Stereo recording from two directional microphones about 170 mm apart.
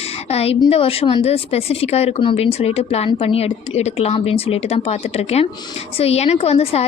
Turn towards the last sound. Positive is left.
turn(degrees=35)  # may be behind; listen again after turning